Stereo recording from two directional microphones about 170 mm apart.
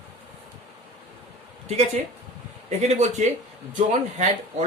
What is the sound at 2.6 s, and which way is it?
Speech, 40° right (ahead or behind).